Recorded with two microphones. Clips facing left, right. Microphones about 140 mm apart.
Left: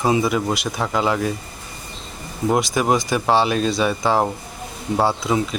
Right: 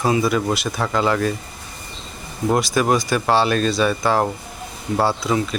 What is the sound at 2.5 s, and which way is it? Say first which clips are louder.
Speech: right 1 dB; 15° left (ahead or behind).